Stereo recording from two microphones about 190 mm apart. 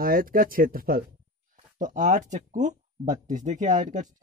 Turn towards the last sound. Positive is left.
turn(degrees=-40)  # may be behind; listen again after turning